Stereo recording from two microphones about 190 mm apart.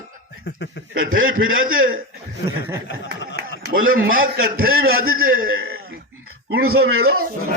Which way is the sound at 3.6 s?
45° right (ahead or behind).